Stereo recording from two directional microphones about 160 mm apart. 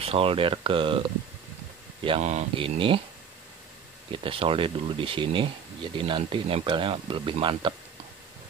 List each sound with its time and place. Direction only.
0.0 s speech: 35° right (ahead or behind)
2.0 s speech: 40° right (ahead or behind)
4.1 s speech: 35° right (ahead or behind)